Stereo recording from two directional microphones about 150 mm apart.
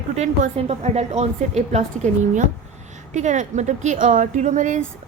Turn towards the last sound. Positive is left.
turn(degrees=-55)  # may be behind; listen again after turning